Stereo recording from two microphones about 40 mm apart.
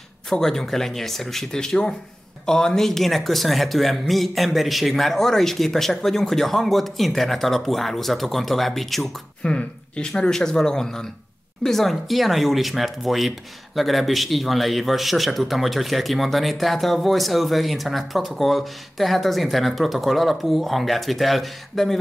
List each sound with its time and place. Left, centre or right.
0.3 s a man's voice: centre
9.4 s a man's voice: left; by 22.0 s centre